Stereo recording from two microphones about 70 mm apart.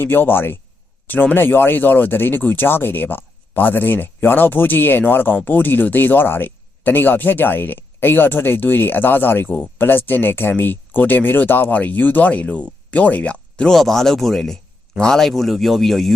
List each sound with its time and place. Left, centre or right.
0.0 s speech: left
13.7 s speech: centre